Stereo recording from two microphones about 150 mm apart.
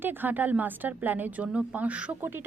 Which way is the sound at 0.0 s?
10° right (ahead or behind).